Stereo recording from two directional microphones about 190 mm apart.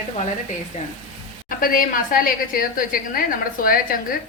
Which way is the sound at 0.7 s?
40° left (ahead or behind).